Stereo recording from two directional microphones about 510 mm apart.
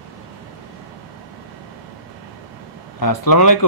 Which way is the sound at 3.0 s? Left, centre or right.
Left.